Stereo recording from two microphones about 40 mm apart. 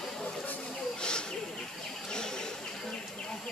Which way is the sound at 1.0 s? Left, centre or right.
Left.